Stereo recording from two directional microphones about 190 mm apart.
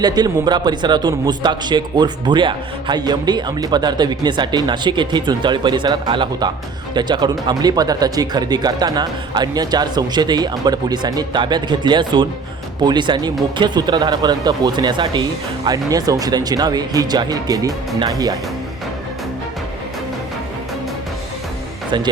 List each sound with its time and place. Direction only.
0.0 s a man's voice: 20° right (ahead or behind)